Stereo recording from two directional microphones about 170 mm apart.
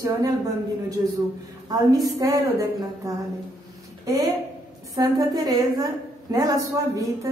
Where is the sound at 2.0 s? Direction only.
20° right (ahead or behind).